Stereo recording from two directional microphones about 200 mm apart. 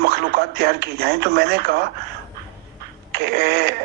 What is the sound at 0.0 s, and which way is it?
Speech, 55° right (ahead or behind).